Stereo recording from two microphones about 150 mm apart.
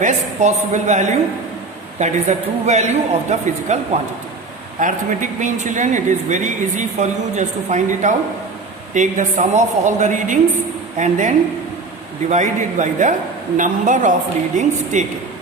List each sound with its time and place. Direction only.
0.0 s a man's voice: 55° right (ahead or behind)